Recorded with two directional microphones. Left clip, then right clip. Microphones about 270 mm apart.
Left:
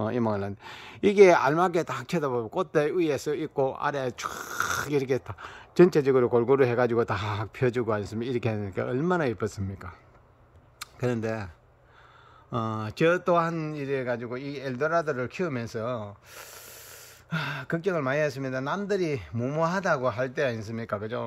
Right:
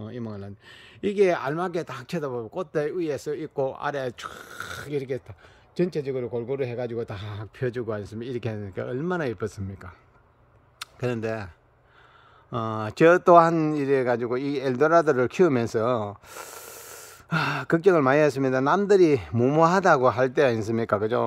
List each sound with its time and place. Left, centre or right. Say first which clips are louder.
0.0 s speech: left 10 dB; centre; by 21.2 s right